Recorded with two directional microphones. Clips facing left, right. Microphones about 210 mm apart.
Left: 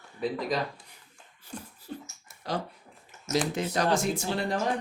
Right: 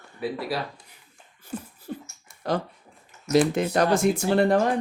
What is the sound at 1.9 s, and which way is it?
Speech, 55° right (ahead or behind).